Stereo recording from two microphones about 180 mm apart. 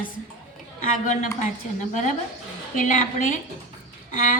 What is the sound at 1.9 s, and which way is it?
Speech, 40° left (ahead or behind).